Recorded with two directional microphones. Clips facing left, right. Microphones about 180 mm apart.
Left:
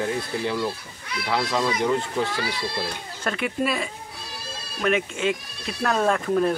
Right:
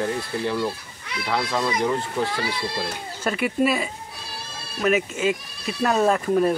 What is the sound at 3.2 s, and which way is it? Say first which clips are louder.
Speech: right 4 dB; 5° right (ahead or behind).